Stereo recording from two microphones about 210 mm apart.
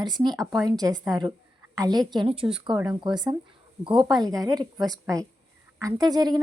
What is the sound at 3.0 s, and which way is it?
A woman's voice, 20° right (ahead or behind).